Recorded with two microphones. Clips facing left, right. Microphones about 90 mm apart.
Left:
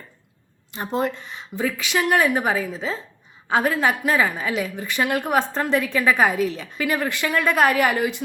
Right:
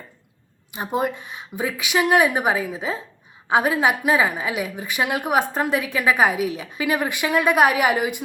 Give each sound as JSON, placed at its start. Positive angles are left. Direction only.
{"t": 0.7, "sound": "a woman's voice", "side_deg": -10}